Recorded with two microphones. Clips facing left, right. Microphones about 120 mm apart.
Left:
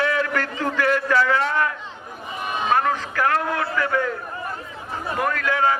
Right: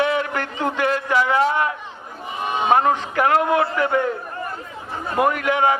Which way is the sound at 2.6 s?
20° right (ahead or behind).